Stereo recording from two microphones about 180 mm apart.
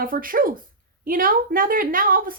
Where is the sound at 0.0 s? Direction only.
50° right (ahead or behind).